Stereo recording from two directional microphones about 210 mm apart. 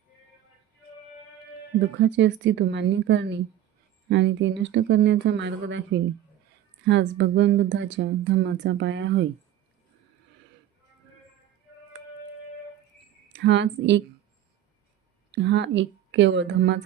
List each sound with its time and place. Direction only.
2.0 s speech: 60° right (ahead or behind)
13.2 s a woman's voice: 55° right (ahead or behind)
15.3 s speech: 55° right (ahead or behind)